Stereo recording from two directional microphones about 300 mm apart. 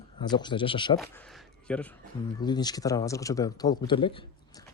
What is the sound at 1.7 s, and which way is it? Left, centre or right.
A man's voice, centre.